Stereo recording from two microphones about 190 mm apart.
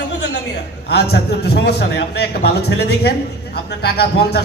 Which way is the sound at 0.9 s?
60° left (ahead or behind).